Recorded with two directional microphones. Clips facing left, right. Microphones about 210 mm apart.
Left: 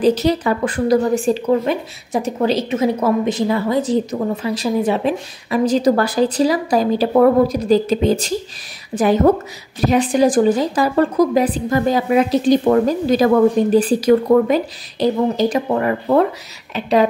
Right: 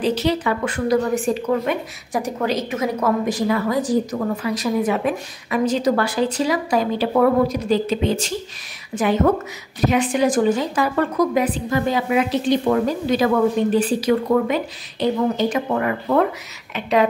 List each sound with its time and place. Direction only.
0.0 s a woman's voice: 40° left (ahead or behind)